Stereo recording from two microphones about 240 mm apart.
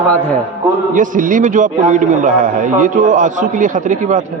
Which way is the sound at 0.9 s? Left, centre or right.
Right.